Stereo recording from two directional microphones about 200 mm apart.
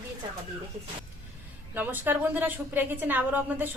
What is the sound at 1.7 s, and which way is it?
A woman's voice, 10° right (ahead or behind).